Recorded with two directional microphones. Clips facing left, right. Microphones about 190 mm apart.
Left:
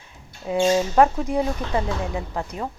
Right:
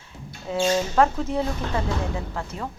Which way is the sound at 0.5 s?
15° left (ahead or behind).